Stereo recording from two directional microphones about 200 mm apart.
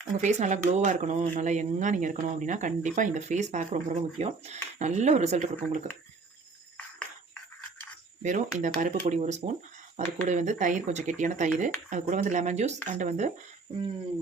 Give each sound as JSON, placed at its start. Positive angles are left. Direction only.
{"t": 0.1, "sound": "speech", "side_deg": -35}
{"t": 8.2, "sound": "speech", "side_deg": -35}